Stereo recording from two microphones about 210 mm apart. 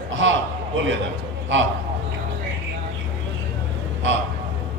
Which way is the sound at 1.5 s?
60° right (ahead or behind).